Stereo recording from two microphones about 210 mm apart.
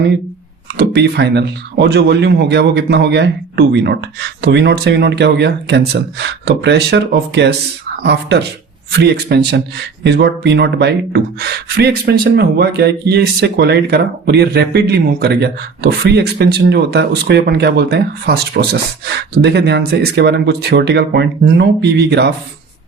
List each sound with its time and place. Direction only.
0.8 s a man's voice: 50° right (ahead or behind)